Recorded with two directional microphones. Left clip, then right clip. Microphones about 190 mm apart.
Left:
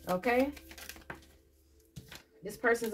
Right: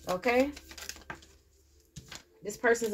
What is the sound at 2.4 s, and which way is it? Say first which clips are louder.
Speech: right 3 dB; 40° right (ahead or behind).